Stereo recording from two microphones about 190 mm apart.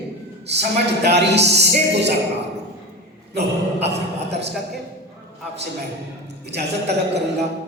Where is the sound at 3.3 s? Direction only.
60° right (ahead or behind).